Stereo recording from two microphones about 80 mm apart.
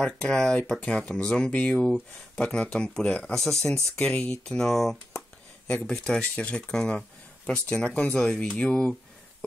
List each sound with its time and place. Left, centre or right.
0.0 s speech: centre